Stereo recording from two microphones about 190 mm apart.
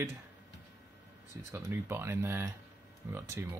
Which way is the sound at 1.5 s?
10° right (ahead or behind).